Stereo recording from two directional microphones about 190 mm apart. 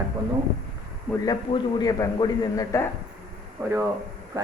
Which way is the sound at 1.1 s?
20° left (ahead or behind).